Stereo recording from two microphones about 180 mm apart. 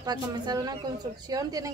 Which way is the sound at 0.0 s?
20° right (ahead or behind).